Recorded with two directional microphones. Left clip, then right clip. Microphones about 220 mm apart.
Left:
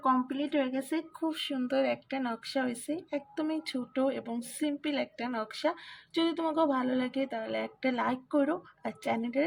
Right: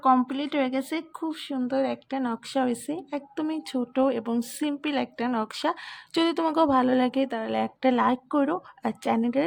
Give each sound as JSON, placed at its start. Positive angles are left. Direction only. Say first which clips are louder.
{"t": 0.0, "sound": "speech", "louder": "right 7 dB", "side_deg": -30}
{"t": 1.3, "sound": "speech", "louder": "right 3 dB", "side_deg": -15}